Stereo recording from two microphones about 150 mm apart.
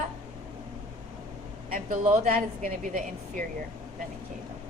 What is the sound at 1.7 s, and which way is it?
Speech, 60° right (ahead or behind).